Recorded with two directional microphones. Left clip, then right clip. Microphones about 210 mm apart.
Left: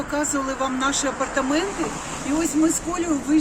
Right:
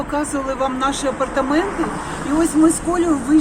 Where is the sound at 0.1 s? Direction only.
5° left (ahead or behind).